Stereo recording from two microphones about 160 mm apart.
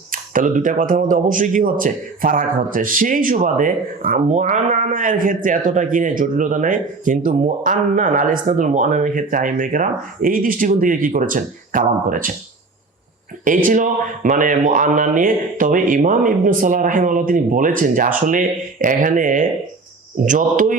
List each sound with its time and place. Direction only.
0.1 s speech: 60° right (ahead or behind)
13.4 s speech: 55° right (ahead or behind)